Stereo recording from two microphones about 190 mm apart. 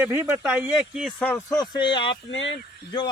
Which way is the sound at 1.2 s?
10° left (ahead or behind).